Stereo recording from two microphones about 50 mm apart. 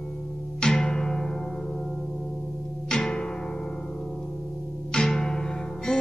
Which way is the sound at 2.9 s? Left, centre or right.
Centre.